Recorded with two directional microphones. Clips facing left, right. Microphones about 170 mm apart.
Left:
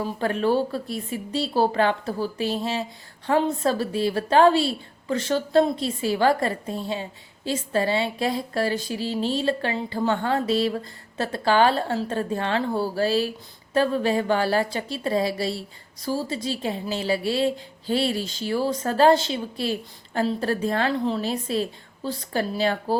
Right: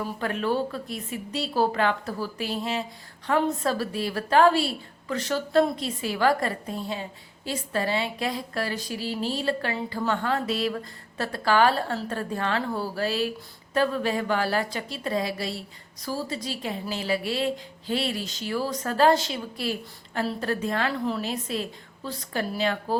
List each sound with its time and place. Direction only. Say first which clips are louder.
0.0 s a woman's voice: left 4 dB; 30° left (ahead or behind)